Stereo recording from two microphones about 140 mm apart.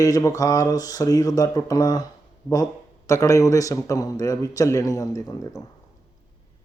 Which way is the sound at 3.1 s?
20° left (ahead or behind).